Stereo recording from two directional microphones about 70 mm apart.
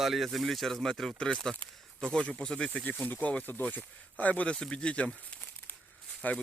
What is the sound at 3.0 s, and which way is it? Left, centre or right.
Speech, left.